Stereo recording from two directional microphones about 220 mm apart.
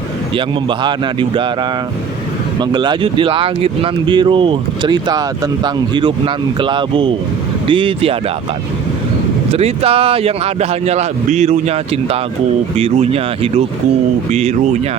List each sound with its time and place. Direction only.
0.3 s speech: 20° right (ahead or behind)
2.6 s speech: 20° right (ahead or behind)
9.5 s speech: 25° right (ahead or behind)